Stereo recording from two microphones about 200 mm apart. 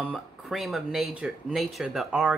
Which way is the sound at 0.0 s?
Centre (ahead or behind).